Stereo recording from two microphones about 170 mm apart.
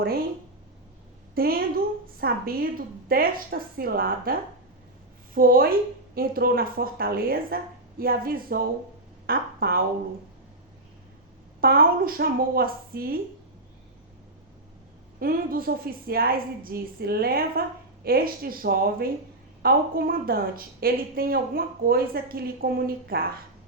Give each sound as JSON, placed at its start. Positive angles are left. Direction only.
{"t": 1.4, "sound": "a woman's voice", "side_deg": -60}
{"t": 11.6, "sound": "a woman's voice", "side_deg": -60}
{"t": 15.2, "sound": "a woman's voice", "side_deg": -60}